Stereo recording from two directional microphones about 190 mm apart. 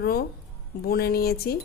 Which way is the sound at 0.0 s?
55° left (ahead or behind).